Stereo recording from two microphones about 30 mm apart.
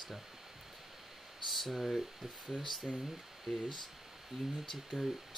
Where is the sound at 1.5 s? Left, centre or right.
Centre.